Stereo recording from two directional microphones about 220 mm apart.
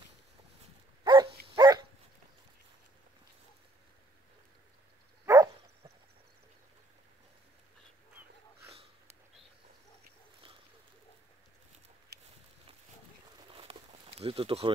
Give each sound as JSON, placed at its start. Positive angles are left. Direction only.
{"t": 1.0, "sound": "dog", "side_deg": -20}
{"t": 5.2, "sound": "dog", "side_deg": -10}
{"t": 13.5, "sound": "a sound", "side_deg": -25}